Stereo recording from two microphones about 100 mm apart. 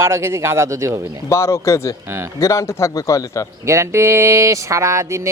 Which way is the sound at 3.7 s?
30° right (ahead or behind).